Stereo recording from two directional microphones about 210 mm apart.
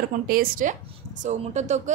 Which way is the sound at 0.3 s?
40° right (ahead or behind).